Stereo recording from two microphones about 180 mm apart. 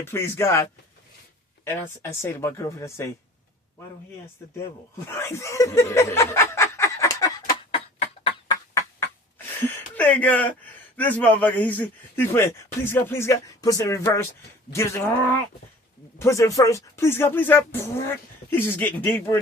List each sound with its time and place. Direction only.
0.0 s a man's voice: 15° left (ahead or behind)
5.0 s speech: 15° left (ahead or behind)
7.7 s tick-tock: 30° left (ahead or behind)
8.4 s a sound: 15° left (ahead or behind)
10.9 s a man's voice: 10° left (ahead or behind)
16.1 s a man's voice: 15° left (ahead or behind)